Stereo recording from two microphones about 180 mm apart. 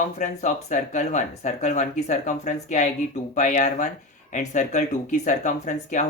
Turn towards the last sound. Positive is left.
turn(degrees=45)  # may be behind; listen again after turning